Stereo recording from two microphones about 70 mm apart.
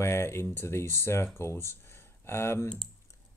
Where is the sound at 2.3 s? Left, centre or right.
Left.